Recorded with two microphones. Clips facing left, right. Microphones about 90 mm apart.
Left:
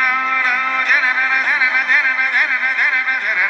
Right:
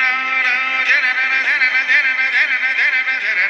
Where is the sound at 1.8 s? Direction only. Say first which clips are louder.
Left 1 dB; 30° left (ahead or behind).